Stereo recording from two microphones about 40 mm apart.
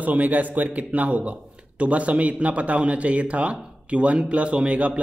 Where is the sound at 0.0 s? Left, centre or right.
Right.